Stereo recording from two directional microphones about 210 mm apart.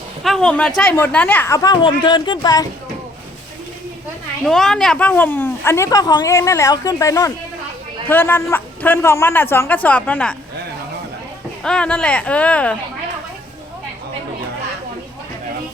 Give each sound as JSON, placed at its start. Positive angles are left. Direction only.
{"t": 0.2, "sound": "speech", "side_deg": 0}
{"t": 4.4, "sound": "speech", "side_deg": 0}
{"t": 11.6, "sound": "speech", "side_deg": 5}